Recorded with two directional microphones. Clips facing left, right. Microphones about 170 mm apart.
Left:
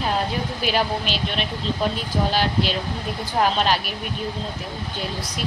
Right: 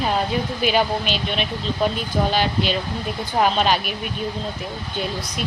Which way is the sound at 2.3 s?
5° left (ahead or behind).